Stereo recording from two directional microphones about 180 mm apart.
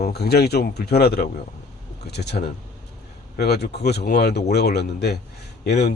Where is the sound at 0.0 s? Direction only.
65° left (ahead or behind).